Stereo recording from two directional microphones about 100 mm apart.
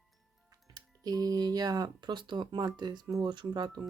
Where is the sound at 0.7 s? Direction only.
40° right (ahead or behind).